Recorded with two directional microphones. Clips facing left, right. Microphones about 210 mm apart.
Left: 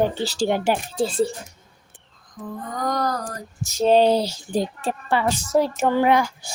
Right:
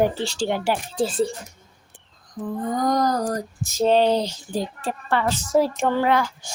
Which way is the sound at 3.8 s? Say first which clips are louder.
Left 2 dB; 10° left (ahead or behind).